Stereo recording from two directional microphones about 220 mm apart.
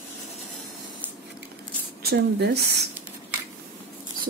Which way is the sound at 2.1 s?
45° right (ahead or behind).